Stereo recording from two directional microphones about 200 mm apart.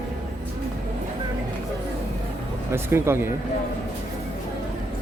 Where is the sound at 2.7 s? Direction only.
10° right (ahead or behind).